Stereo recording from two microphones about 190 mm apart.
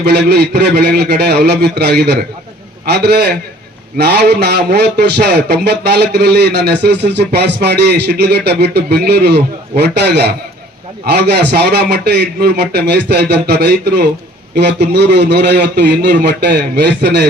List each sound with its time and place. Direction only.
0.0 s a man's voice: 60° right (ahead or behind)